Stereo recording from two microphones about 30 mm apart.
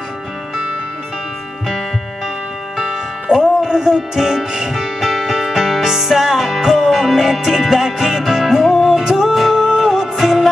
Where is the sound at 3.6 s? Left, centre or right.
Centre.